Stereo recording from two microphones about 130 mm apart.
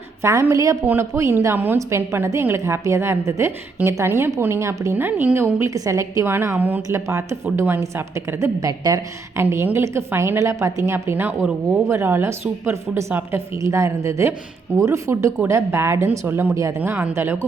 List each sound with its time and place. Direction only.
0.2 s a woman's voice: 20° right (ahead or behind)
9.4 s a woman's voice: 15° right (ahead or behind)